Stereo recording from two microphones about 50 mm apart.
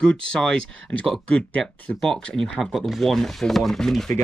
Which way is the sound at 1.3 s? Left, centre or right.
Left.